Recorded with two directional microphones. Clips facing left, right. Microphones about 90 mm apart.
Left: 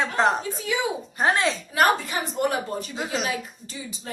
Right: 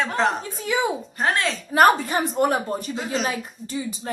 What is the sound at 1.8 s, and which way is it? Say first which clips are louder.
A woman's voice: right 5 dB; 40° right (ahead or behind).